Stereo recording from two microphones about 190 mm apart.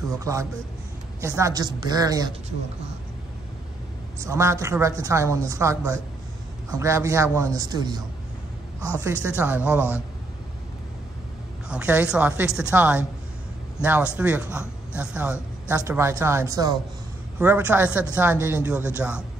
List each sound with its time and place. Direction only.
0.2 s a woman's voice: 15° right (ahead or behind)
4.2 s speech: 15° right (ahead or behind)
9.4 s speech: 5° right (ahead or behind)
11.7 s speech: 10° right (ahead or behind)